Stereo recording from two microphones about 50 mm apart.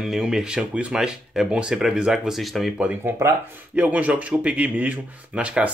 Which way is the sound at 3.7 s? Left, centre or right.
Right.